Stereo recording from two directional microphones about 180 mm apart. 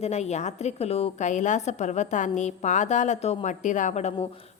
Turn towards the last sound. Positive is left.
turn(degrees=35)  # may be behind; listen again after turning